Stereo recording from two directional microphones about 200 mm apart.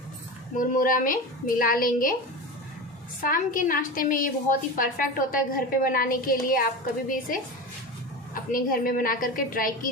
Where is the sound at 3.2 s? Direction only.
45° left (ahead or behind).